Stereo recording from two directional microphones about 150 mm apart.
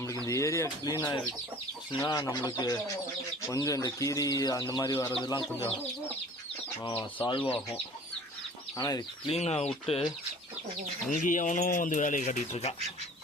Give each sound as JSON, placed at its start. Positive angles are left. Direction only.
{"t": 0.3, "sound": "speech", "side_deg": 20}
{"t": 5.2, "sound": "speech", "side_deg": 30}
{"t": 7.0, "sound": "speech", "side_deg": 35}
{"t": 8.7, "sound": "speech", "side_deg": 25}
{"t": 9.2, "sound": "speech", "side_deg": 45}
{"t": 11.1, "sound": "speech", "side_deg": 60}